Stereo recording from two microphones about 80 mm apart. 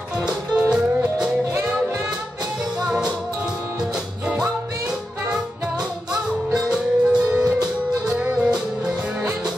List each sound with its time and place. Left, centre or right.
0.6 s music: centre
6.7 s music: centre